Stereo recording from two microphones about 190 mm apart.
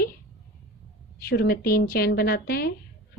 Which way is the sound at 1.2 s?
55° left (ahead or behind).